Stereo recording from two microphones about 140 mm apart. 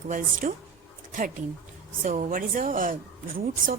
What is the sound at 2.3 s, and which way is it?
Speech, 85° right.